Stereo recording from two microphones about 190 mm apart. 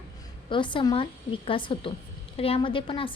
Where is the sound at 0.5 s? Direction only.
25° left (ahead or behind).